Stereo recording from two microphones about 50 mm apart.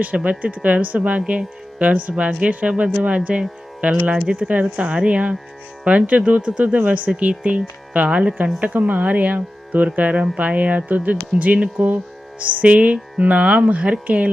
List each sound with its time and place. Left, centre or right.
0.0 s speech: right